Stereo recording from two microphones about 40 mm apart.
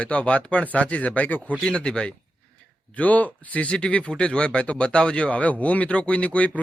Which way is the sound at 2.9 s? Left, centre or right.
Left.